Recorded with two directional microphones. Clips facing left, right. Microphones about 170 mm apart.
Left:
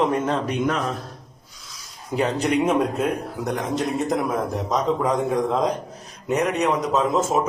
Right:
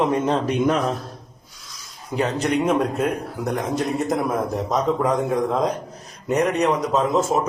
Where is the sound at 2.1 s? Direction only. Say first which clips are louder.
Even; 15° left (ahead or behind).